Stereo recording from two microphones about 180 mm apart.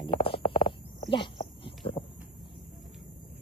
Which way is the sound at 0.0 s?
30° left (ahead or behind).